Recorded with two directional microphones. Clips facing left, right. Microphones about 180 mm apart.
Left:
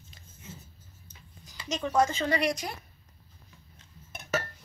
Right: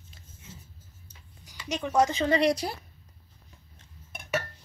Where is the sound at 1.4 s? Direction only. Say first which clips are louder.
Right 1 dB; 15° right (ahead or behind).